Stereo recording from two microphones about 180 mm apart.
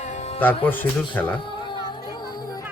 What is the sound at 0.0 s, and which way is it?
Music, 40° left (ahead or behind).